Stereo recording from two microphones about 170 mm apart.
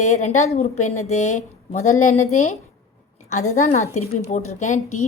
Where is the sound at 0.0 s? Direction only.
45° left (ahead or behind).